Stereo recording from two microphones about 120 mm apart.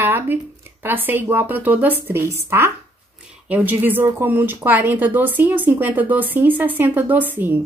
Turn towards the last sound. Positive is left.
turn(degrees=-15)  # may be behind; listen again after turning